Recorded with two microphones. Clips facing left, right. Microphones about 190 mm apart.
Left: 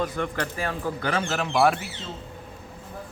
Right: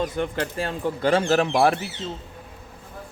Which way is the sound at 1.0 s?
35° right (ahead or behind).